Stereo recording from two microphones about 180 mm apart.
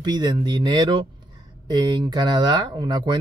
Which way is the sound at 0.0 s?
25° right (ahead or behind).